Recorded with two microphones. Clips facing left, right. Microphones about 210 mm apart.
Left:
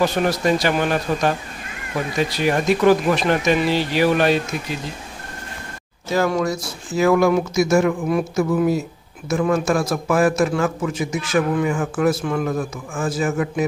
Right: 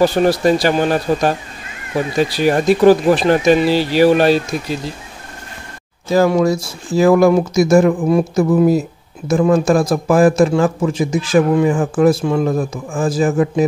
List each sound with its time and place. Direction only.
0.0 s a man's voice: 30° right (ahead or behind)
6.1 s a man's voice: 30° right (ahead or behind)